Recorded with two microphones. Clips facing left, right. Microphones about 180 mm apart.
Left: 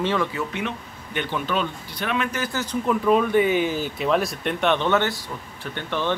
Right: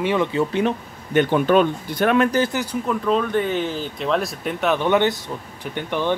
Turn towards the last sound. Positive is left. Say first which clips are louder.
# right 3 dB
turn(degrees=-15)  # may be behind; listen again after turning